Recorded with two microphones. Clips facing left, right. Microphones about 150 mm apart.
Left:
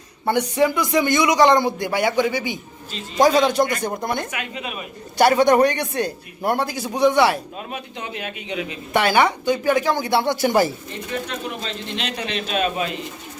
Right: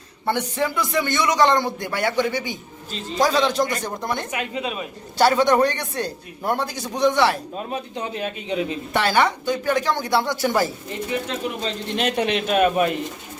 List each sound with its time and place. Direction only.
0.3 s speech: 15° left (ahead or behind)
4.3 s a man's voice: 30° right (ahead or behind)
5.1 s speech: 15° left (ahead or behind)
7.7 s a man's voice: 35° right (ahead or behind)
8.9 s speech: 15° left (ahead or behind)
11.6 s speech: 50° right (ahead or behind)